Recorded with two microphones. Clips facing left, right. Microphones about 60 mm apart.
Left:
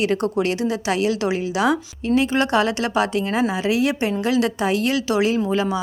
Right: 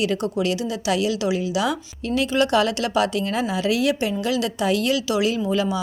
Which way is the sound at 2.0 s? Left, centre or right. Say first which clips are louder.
Left 2 dB; left.